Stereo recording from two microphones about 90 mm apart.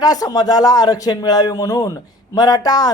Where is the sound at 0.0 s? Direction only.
45° left (ahead or behind).